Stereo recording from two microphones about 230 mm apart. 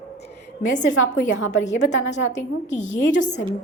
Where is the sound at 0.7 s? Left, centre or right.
Left.